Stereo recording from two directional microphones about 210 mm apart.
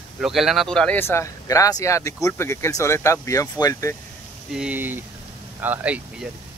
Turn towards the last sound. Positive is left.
turn(degrees=-5)  # may be behind; listen again after turning